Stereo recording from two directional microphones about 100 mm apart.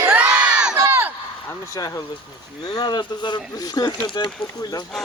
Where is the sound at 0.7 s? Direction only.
25° right (ahead or behind).